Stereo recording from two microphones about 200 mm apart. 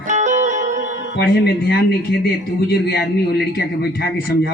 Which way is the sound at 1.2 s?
50° left (ahead or behind).